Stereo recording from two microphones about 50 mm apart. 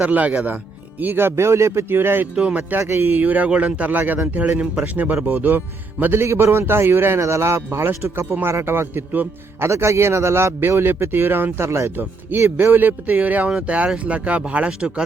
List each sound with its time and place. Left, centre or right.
0.0 s speech: right
1.4 s speech: right
1.9 s a man's voice: right
2.3 s speech: right
2.6 s a man's voice: right
7.2 s speech: right
10.6 s a man's voice: right
12.3 s speech: right